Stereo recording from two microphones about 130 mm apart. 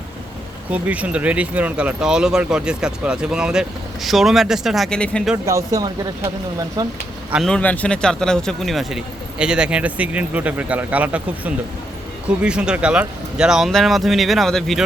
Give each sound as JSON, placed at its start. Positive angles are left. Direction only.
{"t": 0.7, "sound": "speech", "side_deg": -10}
{"t": 5.5, "sound": "speech", "side_deg": -25}
{"t": 7.4, "sound": "speech", "side_deg": 10}